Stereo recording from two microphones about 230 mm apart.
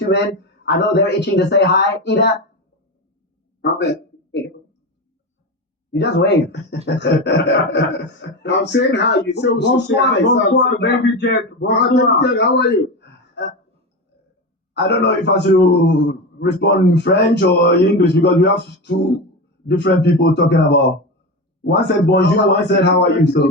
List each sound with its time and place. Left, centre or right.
0.6 s a man's voice: left
5.9 s a man's voice: left
14.7 s a man's voice: left